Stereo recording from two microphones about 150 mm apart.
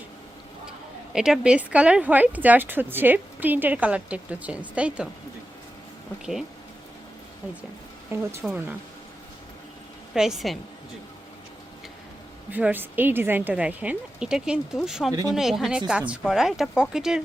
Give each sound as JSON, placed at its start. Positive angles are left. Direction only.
{"t": 1.1, "sound": "speech", "side_deg": -5}
{"t": 8.1, "sound": "speech", "side_deg": -15}
{"t": 10.2, "sound": "speech", "side_deg": -5}
{"t": 12.5, "sound": "speech", "side_deg": -10}